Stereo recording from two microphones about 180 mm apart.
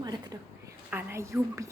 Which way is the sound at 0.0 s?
20° right (ahead or behind).